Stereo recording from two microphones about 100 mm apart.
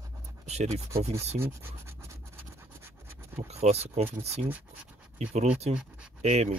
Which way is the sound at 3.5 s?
90° right.